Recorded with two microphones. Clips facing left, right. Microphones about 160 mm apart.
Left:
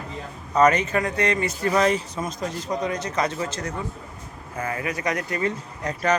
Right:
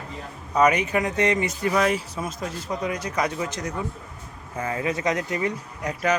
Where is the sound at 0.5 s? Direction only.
10° right (ahead or behind).